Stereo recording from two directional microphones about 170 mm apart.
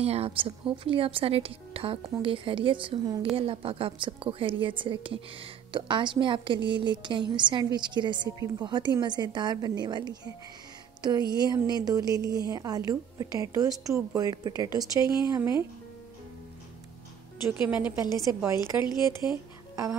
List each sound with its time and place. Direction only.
0.0 s a woman's voice: 35° right (ahead or behind); by 15.6 s 20° right (ahead or behind)
17.7 s a woman's voice: 25° left (ahead or behind)
18.2 s a woman's voice: 15° right (ahead or behind)
19.7 s speech: 20° right (ahead or behind)